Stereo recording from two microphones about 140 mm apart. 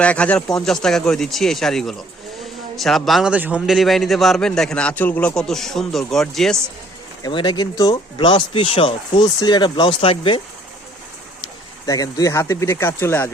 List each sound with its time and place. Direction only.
0.0 s a man's voice: 10° left (ahead or behind)
7.2 s speech: 35° left (ahead or behind)
11.9 s speech: 25° left (ahead or behind)